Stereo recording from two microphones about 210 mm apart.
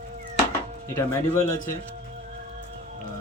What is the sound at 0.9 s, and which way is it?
Speech, 10° left (ahead or behind).